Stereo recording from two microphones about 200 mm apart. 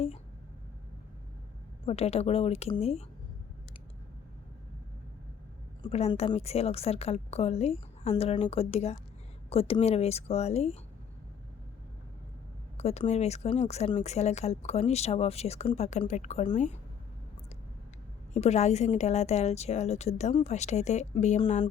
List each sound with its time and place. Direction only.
1.8 s speech: 30° left (ahead or behind)
5.8 s speech: 25° left (ahead or behind)
12.7 s speech: 30° left (ahead or behind)
18.3 s speech: 35° left (ahead or behind)